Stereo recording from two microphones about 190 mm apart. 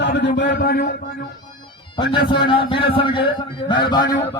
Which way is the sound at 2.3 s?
25° left (ahead or behind).